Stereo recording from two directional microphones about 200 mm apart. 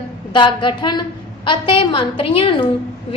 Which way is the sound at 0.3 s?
25° left (ahead or behind).